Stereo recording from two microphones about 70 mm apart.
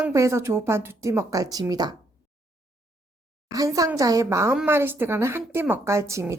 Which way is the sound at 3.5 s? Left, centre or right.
Right.